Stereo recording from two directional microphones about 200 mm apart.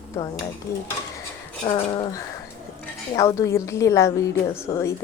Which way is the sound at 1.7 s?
20° left (ahead or behind).